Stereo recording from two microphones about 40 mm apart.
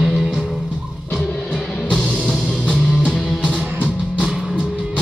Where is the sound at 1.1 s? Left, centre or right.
Left.